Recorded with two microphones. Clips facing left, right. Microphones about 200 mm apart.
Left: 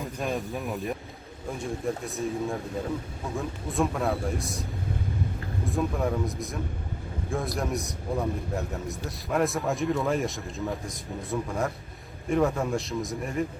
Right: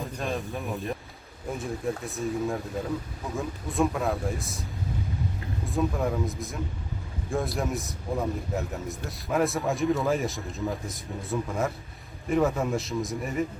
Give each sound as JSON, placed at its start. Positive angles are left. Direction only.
{"t": 0.0, "sound": "a man's voice", "side_deg": 0}
{"t": 5.6, "sound": "a man's voice", "side_deg": 0}